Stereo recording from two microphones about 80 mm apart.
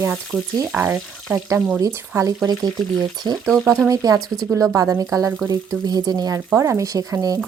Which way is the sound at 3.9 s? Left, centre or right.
Right.